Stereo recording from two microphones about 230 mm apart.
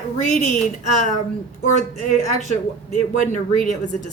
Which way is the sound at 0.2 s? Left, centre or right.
Left.